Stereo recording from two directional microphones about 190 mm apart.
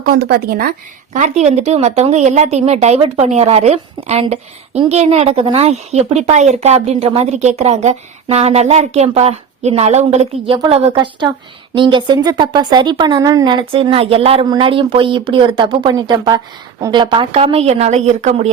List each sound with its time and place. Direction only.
0.0 s speech: 55° right (ahead or behind)
1.1 s a woman's voice: 40° right (ahead or behind)